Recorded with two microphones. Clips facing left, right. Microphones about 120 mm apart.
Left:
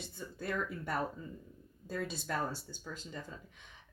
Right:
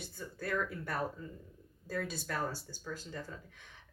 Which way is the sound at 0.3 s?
20° left (ahead or behind).